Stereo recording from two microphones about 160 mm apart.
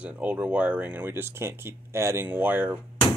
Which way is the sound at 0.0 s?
10° right (ahead or behind).